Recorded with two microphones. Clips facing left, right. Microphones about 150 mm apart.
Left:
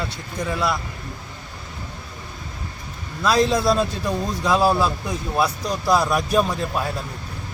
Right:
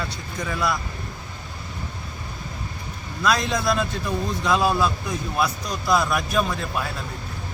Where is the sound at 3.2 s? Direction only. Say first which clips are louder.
Left 4 dB; 30° left (ahead or behind).